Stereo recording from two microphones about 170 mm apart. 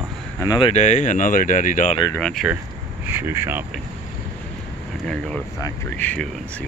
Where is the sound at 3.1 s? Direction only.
15° right (ahead or behind).